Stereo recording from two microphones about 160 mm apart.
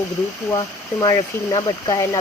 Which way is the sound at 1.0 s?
20° left (ahead or behind).